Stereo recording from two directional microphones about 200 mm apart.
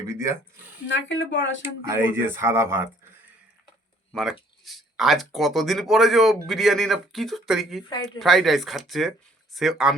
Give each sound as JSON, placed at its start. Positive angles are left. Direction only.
{"t": 0.1, "sound": "speech", "side_deg": -15}
{"t": 0.9, "sound": "speech", "side_deg": 70}
{"t": 1.6, "sound": "speech", "side_deg": -10}
{"t": 4.1, "sound": "speech", "side_deg": 0}
{"t": 7.9, "sound": "speech", "side_deg": 20}
{"t": 8.2, "sound": "speech", "side_deg": 0}